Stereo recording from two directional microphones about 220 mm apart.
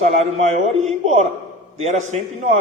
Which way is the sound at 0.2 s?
30° right (ahead or behind).